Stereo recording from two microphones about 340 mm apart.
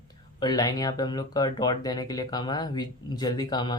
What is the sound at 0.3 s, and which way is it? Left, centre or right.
Speech, centre.